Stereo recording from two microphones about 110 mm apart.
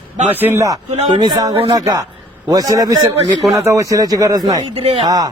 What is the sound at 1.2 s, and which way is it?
A man's voice, 35° right (ahead or behind).